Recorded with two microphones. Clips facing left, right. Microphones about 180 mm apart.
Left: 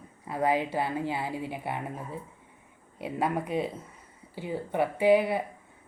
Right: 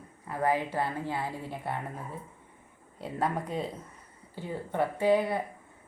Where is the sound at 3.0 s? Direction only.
10° left (ahead or behind).